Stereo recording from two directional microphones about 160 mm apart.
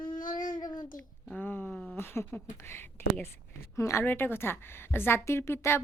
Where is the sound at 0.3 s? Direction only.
55° left (ahead or behind).